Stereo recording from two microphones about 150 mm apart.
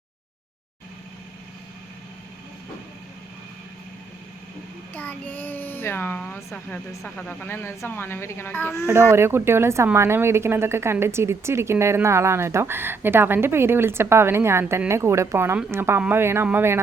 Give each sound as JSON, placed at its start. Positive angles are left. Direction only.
{"t": 4.9, "sound": "a child's voice", "side_deg": 10}
{"t": 8.9, "sound": "speech", "side_deg": -20}